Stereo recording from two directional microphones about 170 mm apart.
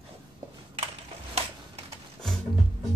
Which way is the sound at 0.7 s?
35° right (ahead or behind).